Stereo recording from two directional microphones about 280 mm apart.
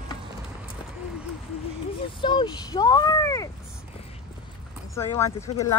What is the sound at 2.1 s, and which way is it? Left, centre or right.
Speech, centre.